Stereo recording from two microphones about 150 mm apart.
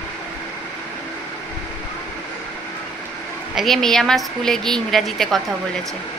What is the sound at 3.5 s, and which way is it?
Speech, centre (ahead or behind).